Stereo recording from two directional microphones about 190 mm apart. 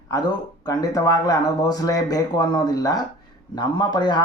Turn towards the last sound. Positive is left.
turn(degrees=25)  # may be behind; listen again after turning